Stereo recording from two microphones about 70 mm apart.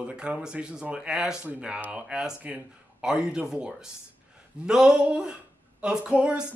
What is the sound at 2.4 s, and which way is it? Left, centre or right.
Speech, right.